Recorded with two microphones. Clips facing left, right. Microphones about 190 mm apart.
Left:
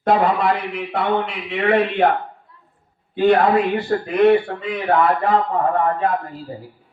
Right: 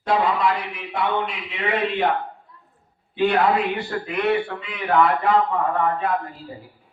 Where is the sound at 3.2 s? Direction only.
45° left (ahead or behind).